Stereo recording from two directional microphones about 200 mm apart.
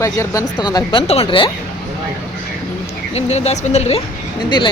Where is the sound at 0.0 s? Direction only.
15° left (ahead or behind).